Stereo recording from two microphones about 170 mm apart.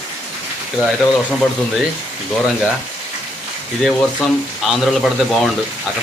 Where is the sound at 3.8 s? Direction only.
Centre (ahead or behind).